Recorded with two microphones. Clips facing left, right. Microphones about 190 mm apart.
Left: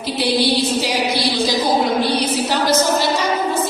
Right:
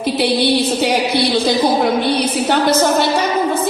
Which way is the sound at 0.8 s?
60° right (ahead or behind).